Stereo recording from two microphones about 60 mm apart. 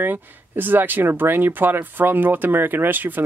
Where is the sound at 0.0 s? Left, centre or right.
Right.